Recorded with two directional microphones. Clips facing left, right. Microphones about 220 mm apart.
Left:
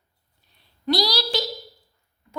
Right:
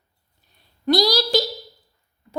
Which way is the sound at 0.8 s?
50° right (ahead or behind).